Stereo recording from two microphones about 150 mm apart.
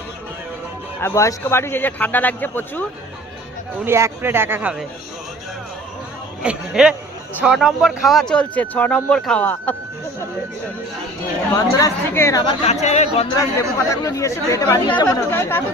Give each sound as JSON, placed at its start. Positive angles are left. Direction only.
{"t": 1.0, "sound": "speech", "side_deg": 20}
{"t": 3.8, "sound": "speech", "side_deg": -15}
{"t": 6.4, "sound": "speech", "side_deg": -5}
{"t": 11.5, "sound": "speech", "side_deg": 20}
{"t": 12.6, "sound": "speech", "side_deg": 50}
{"t": 13.4, "sound": "speech", "side_deg": 20}